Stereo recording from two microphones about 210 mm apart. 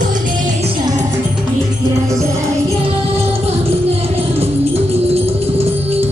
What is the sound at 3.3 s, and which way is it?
Music, 30° right (ahead or behind).